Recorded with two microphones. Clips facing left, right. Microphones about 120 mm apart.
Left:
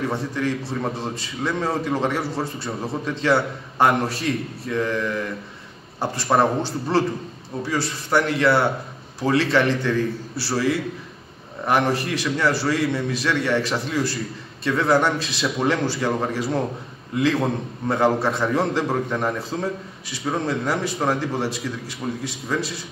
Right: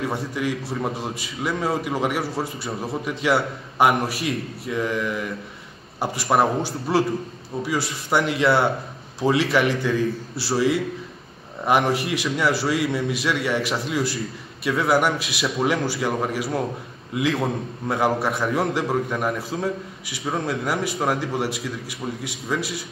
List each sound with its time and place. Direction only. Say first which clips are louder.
0.1 s a man's voice: left 1 dB; 10° right (ahead or behind)